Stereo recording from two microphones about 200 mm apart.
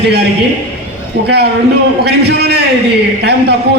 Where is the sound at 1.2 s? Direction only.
55° right (ahead or behind).